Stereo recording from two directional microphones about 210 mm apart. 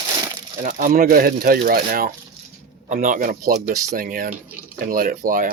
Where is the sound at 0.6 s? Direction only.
40° right (ahead or behind).